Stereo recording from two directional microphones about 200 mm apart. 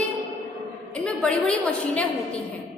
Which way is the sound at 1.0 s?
5° left (ahead or behind).